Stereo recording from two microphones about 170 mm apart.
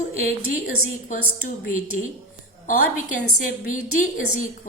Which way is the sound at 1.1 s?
50° left (ahead or behind).